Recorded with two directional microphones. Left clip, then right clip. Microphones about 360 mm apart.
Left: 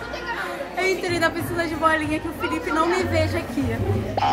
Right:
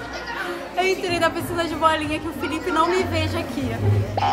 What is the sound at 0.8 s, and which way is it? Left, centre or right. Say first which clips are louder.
A woman's voice: right 1 dB; centre.